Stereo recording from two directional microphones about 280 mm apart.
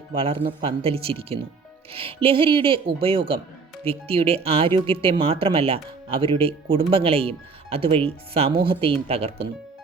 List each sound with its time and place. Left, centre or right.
0.2 s speech: centre